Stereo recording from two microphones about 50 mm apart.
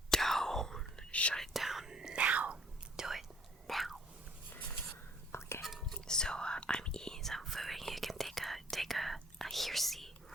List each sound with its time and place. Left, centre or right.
0.1 s whispering: centre
1.1 s whispering: left
1.4 s whispering: centre
2.1 s whispering: right
2.9 s whispering: centre
3.7 s a sound: centre
5.3 s whispering: left
5.9 s whispering: centre